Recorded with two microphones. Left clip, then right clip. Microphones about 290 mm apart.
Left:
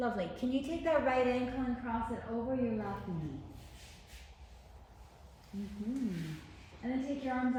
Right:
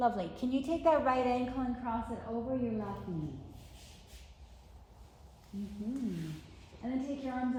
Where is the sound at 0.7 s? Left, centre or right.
Centre.